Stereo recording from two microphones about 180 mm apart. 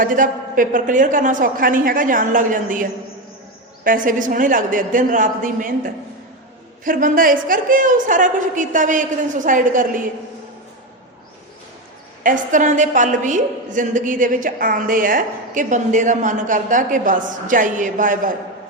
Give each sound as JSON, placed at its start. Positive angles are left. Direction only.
{"t": 0.0, "sound": "a woman's voice", "side_deg": -50}
{"t": 3.8, "sound": "a woman's voice", "side_deg": -50}
{"t": 12.2, "sound": "a woman's voice", "side_deg": -45}